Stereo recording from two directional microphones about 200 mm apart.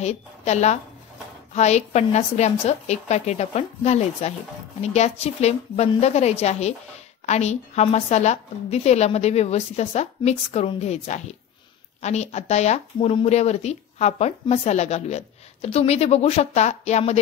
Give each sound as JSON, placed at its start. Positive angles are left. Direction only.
{"t": 0.0, "sound": "speech", "side_deg": 35}